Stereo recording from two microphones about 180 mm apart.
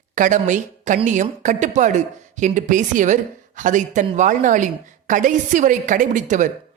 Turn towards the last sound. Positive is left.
turn(degrees=-45)  # may be behind; listen again after turning